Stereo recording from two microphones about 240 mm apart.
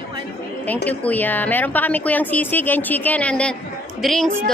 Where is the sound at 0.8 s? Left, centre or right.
Centre.